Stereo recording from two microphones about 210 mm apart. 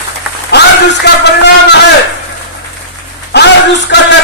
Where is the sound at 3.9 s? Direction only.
55° left (ahead or behind).